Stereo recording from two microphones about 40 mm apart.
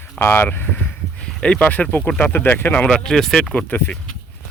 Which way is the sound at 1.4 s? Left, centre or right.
Left.